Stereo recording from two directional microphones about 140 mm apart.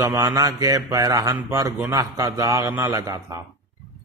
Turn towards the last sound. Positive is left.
turn(degrees=-25)  # may be behind; listen again after turning